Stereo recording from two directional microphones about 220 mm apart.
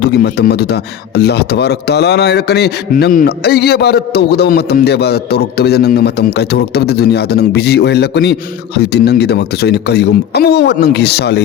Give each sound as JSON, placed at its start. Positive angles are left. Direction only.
{"t": 0.0, "sound": "a man's voice", "side_deg": 45}